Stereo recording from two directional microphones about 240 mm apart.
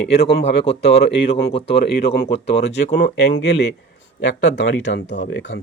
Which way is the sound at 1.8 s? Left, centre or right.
Left.